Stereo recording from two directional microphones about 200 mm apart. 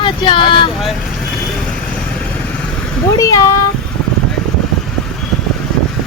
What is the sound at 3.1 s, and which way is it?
Speech, 15° left (ahead or behind).